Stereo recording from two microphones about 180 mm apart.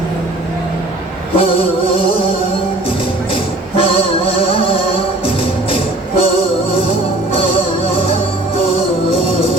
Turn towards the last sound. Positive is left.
turn(degrees=30)  # may be behind; listen again after turning